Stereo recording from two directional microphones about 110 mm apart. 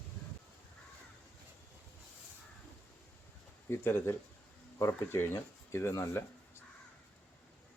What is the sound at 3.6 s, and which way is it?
Speech, 20° left (ahead or behind).